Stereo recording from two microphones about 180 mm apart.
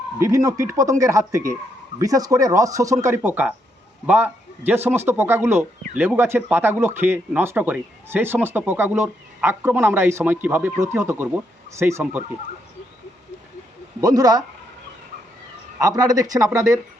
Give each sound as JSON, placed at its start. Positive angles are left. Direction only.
{"t": 0.2, "sound": "speech", "side_deg": -15}
{"t": 14.0, "sound": "speech", "side_deg": -20}
{"t": 15.8, "sound": "speech", "side_deg": -20}